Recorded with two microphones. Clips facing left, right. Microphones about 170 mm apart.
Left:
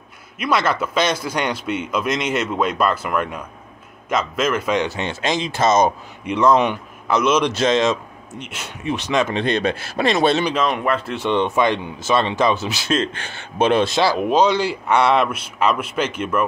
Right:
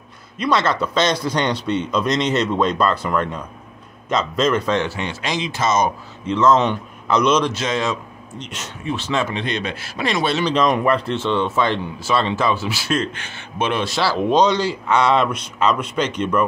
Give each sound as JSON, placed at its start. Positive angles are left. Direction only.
{"t": 0.4, "sound": "a man's voice", "side_deg": 10}
{"t": 6.2, "sound": "a man's voice", "side_deg": 15}
{"t": 7.7, "sound": "speech", "side_deg": 20}
{"t": 8.4, "sound": "a man's voice", "side_deg": 10}
{"t": 9.3, "sound": "speech", "side_deg": 45}
{"t": 10.4, "sound": "speech", "side_deg": 5}
{"t": 11.1, "sound": "speech", "side_deg": 15}
{"t": 13.2, "sound": "speech", "side_deg": 35}
{"t": 13.9, "sound": "a man's voice", "side_deg": 15}